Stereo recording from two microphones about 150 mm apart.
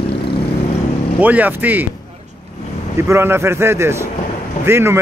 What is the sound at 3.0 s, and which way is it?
Speech, 15° right (ahead or behind).